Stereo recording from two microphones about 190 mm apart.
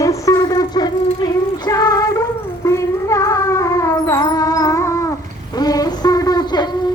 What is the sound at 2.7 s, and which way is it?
Music, 15° left (ahead or behind).